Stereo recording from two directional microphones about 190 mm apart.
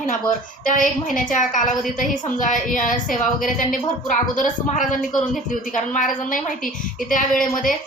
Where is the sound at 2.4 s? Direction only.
45° left (ahead or behind).